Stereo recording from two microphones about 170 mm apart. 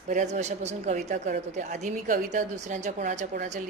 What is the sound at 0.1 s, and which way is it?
A woman's voice, 45° right (ahead or behind).